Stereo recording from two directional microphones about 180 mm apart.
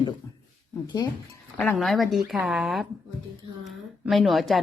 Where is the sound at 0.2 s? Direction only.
15° left (ahead or behind).